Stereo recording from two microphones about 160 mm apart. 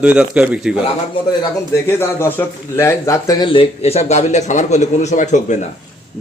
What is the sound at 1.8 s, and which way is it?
A man's voice, 15° left (ahead or behind).